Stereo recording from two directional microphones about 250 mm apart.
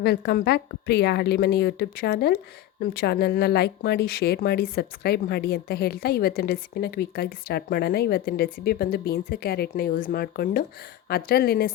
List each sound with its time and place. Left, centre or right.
0.0 s a woman's voice: left